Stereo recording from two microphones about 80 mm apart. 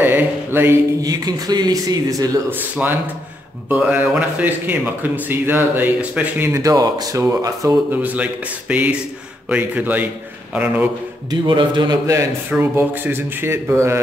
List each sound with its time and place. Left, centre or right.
0.0 s mantra: right
1.0 s speech: right
2.5 s a man's voice: right
6.5 s speech: right
7.9 s a man's voice: right
11.2 s speech: right
12.4 s a man's voice: right